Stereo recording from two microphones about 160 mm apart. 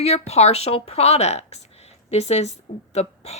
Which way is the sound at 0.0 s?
40° left (ahead or behind).